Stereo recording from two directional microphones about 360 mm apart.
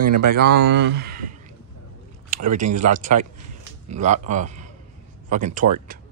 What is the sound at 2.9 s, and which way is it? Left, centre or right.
A man's voice, right.